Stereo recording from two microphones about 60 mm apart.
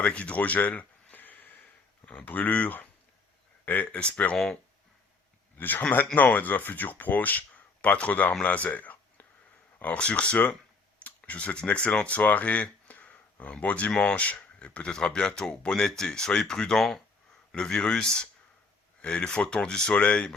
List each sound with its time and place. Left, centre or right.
0.0 s a sound: left
2.0 s speech: left
5.5 s speech: left